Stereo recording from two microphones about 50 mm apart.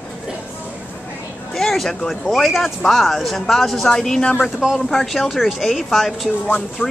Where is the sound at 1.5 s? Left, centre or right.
Centre.